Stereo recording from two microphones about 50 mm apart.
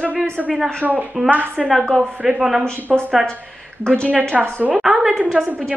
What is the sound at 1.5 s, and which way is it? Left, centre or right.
A woman's voice, centre.